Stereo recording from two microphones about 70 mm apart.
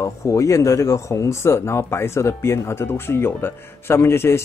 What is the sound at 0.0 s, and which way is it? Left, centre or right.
Speech, left.